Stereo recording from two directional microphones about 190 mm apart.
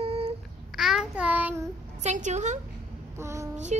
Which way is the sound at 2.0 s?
40° right (ahead or behind).